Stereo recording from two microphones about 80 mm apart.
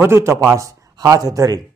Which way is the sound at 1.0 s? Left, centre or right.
Right.